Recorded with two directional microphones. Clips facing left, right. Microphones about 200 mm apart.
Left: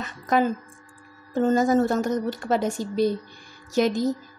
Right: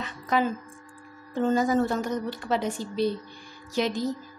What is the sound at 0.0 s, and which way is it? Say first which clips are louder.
Music: left 3 dB; 45° left (ahead or behind).